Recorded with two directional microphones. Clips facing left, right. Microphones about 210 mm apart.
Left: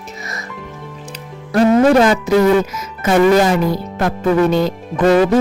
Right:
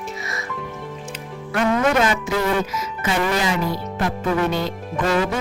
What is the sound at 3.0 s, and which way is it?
Speech, 50° left (ahead or behind).